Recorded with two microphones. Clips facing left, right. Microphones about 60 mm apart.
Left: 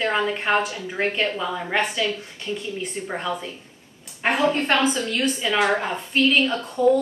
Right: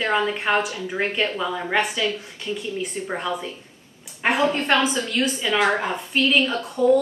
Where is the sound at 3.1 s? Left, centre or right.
Centre.